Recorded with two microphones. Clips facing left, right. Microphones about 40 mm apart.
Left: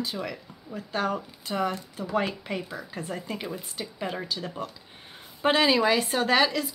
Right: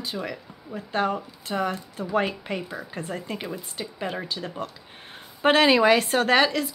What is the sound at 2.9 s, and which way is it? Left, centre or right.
Speech, right.